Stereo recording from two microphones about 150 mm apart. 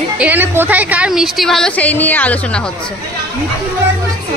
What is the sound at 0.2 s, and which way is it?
A woman's voice, 10° right (ahead or behind).